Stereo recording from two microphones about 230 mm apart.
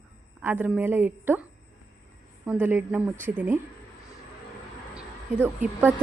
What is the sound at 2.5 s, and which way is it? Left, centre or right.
Speech, centre.